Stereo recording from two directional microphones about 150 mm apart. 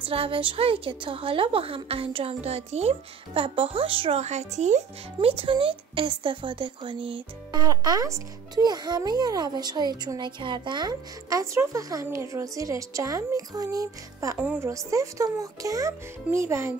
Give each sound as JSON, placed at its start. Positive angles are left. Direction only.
{"t": 0.0, "sound": "a woman's voice", "side_deg": -35}